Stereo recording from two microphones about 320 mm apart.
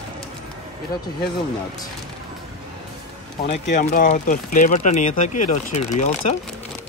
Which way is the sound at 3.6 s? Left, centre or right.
Left.